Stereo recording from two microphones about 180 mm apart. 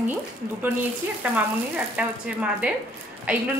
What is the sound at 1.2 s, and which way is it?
A woman's voice, 10° right (ahead or behind).